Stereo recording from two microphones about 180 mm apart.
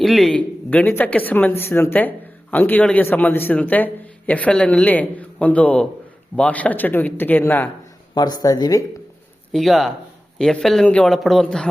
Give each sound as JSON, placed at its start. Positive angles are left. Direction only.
{"t": 0.0, "sound": "speech", "side_deg": 0}
{"t": 8.1, "sound": "speech", "side_deg": 20}
{"t": 9.5, "sound": "speech", "side_deg": 0}